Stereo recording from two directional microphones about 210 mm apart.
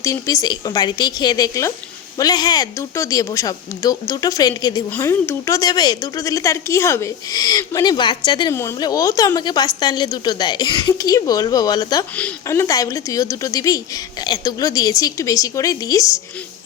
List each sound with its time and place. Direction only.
0.0 s a woman's voice: 15° left (ahead or behind)